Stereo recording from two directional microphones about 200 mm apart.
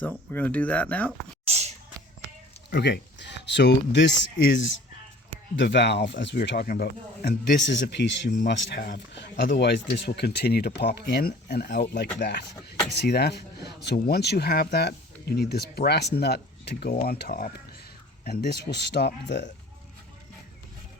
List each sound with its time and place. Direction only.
0.0 s speech: 10° left (ahead or behind)
1.5 s a sound: 35° right (ahead or behind)
2.6 s speech: 55° left (ahead or behind)
16.9 s speech: 40° left (ahead or behind); by 19.5 s 60° left (ahead or behind)